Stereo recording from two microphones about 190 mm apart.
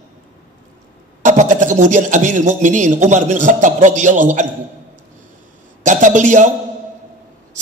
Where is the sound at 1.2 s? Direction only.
40° right (ahead or behind).